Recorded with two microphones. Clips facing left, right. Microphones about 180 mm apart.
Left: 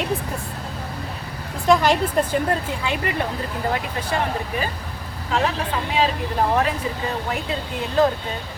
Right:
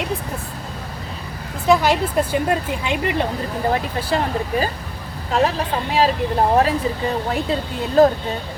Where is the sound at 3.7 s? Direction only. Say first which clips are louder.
Right 3 dB; 35° right (ahead or behind).